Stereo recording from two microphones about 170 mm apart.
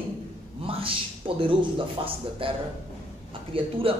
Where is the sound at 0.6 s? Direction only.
30° right (ahead or behind).